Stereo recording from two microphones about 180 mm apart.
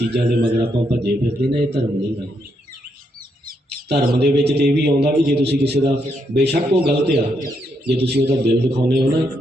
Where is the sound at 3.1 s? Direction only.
55° right (ahead or behind).